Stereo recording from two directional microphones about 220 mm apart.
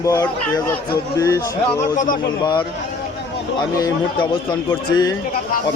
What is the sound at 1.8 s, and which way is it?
Speech, 35° left (ahead or behind).